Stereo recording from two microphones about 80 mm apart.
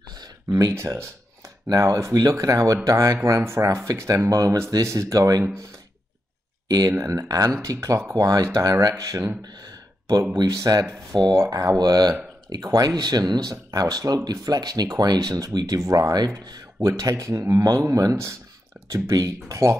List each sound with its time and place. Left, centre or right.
0.2 s speech: right
1.7 s speech: right
6.7 s speech: right
7.0 s speech: right
10.3 s speech: right
16.8 s speech: right